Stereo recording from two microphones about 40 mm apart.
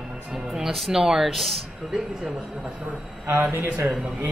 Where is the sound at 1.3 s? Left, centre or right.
Centre.